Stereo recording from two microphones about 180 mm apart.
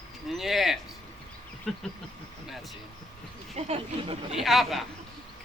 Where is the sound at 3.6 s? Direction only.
35° right (ahead or behind).